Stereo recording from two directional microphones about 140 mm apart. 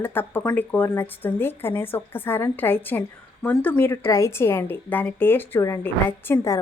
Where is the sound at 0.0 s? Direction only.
15° left (ahead or behind).